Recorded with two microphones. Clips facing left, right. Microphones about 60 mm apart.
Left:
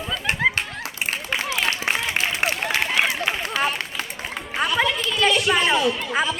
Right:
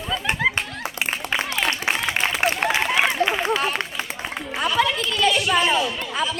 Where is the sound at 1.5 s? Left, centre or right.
Centre.